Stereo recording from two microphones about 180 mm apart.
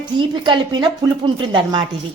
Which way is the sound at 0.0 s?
25° right (ahead or behind).